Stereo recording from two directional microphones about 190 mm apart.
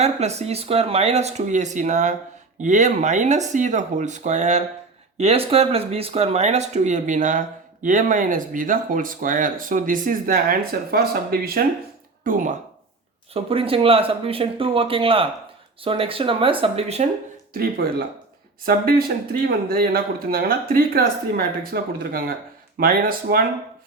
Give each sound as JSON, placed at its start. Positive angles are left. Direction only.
{"t": 0.0, "sound": "speech", "side_deg": -35}
{"t": 13.3, "sound": "speech", "side_deg": -30}
{"t": 17.5, "sound": "speech", "side_deg": -50}